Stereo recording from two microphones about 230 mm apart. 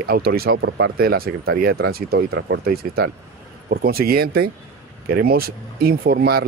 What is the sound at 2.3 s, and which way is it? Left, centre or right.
Speech, right.